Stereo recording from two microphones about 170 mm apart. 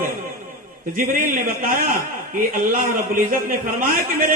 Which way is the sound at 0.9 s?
55° right (ahead or behind).